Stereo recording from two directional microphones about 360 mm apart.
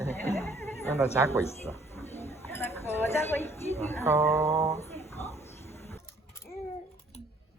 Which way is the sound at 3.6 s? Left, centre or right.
Centre.